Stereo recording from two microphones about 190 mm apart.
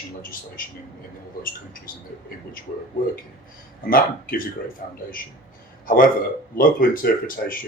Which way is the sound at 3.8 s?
50° left (ahead or behind).